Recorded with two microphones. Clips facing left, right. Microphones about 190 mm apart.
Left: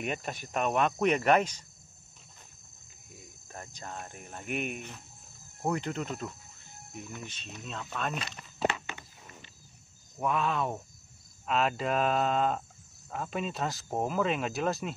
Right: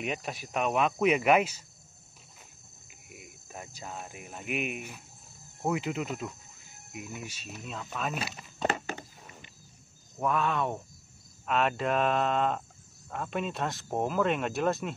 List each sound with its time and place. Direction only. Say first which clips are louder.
0.0 s speech: even; centre (ahead or behind)
2.9 s speech: right 3 dB; 15° right (ahead or behind)
8.6 s walk: right 1 dB; 40° right (ahead or behind)
10.1 s speech: right 1 dB; centre (ahead or behind)